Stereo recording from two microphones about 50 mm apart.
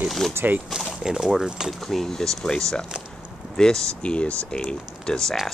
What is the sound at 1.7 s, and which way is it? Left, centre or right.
Speech, centre.